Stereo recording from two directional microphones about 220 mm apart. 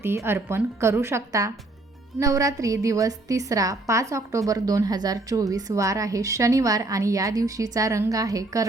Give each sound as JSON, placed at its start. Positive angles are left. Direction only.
{"t": 0.0, "sound": "a woman's voice", "side_deg": -10}